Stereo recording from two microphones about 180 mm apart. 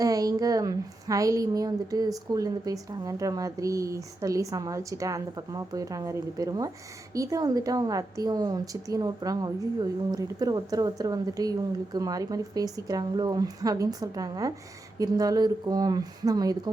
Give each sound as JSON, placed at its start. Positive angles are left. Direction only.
{"t": 0.0, "sound": "a woman's voice", "side_deg": -20}